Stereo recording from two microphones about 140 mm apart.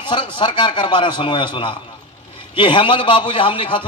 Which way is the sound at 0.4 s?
35° left (ahead or behind).